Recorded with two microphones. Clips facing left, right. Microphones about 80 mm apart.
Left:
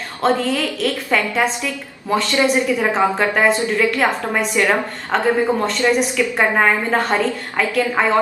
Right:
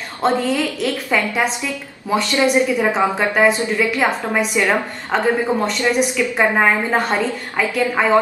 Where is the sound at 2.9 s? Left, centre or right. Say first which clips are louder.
Even; centre.